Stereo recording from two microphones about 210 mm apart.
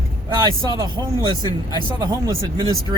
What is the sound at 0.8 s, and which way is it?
Speech, 20° right (ahead or behind).